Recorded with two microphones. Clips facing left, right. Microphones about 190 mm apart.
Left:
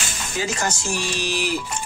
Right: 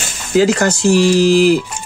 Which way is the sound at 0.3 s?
80° right.